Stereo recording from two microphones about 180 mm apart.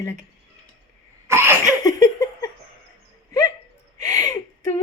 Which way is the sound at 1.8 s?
20° left (ahead or behind).